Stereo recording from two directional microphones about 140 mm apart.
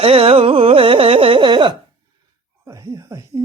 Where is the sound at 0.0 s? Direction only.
45° right (ahead or behind).